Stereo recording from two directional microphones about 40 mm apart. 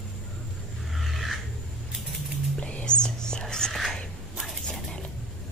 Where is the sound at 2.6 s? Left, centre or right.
Left.